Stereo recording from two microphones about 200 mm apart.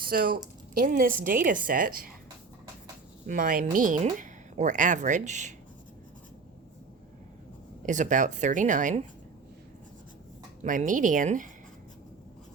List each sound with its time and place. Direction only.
0.0 s speech: 45° right (ahead or behind)
3.2 s speech: 45° right (ahead or behind)
7.9 s speech: 40° right (ahead or behind)
10.6 s speech: 40° right (ahead or behind)